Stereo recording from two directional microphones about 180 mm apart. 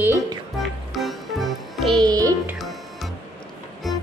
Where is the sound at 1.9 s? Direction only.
20° right (ahead or behind).